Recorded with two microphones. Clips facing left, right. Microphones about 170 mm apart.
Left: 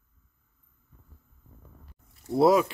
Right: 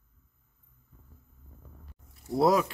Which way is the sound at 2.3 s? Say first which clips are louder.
Left 3 dB; centre (ahead or behind).